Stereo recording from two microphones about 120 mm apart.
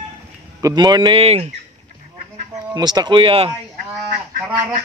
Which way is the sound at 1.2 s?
60° right (ahead or behind).